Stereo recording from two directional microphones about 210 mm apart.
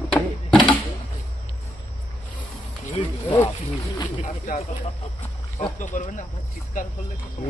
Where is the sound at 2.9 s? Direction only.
20° left (ahead or behind).